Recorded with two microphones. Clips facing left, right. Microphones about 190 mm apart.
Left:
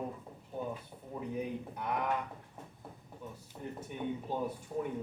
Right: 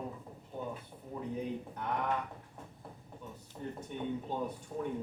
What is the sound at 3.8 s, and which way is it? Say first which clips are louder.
Speech: even; 5° left (ahead or behind).